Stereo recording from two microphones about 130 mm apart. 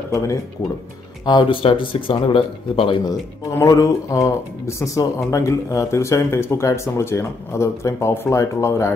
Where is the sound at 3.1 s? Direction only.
25° left (ahead or behind).